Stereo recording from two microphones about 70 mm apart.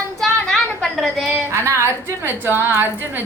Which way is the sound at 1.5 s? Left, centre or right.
Right.